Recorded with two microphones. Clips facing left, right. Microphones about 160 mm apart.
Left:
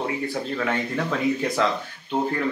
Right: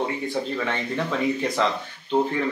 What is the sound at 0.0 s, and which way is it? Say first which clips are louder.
Speech: right 1 dB; 5° left (ahead or behind).